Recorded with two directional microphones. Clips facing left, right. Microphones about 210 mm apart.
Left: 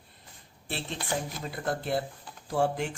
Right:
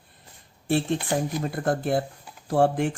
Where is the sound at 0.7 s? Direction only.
50° right (ahead or behind).